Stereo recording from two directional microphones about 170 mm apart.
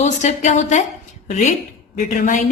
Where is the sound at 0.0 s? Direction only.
45° left (ahead or behind).